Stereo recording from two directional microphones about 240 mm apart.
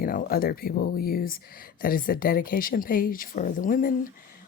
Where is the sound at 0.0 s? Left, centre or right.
Left.